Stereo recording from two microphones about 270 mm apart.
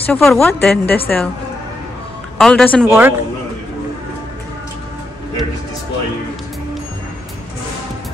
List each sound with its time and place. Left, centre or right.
0.0 s a woman's voice: centre
2.3 s a woman's voice: centre
2.8 s a man's voice: centre